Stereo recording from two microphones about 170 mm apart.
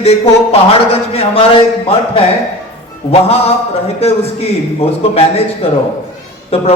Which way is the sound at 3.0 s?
35° left (ahead or behind).